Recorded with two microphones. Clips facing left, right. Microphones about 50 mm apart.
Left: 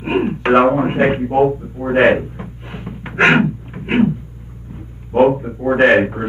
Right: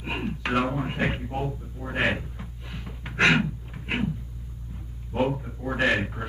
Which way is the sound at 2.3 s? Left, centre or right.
Left.